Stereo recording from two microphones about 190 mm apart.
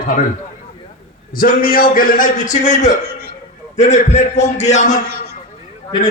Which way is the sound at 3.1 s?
55° right (ahead or behind).